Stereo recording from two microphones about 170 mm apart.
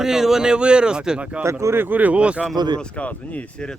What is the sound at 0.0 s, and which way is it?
Speech, 5° right (ahead or behind).